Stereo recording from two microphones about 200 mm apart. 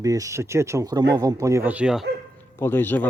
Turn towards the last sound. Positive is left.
turn(degrees=10)  # may be behind; listen again after turning